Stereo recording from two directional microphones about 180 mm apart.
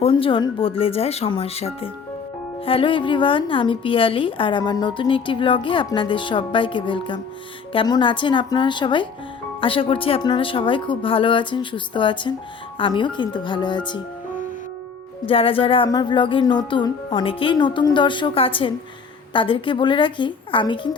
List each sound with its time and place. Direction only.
0.0 s a woman's voice: 30° left (ahead or behind)
15.3 s a woman's voice: 30° left (ahead or behind)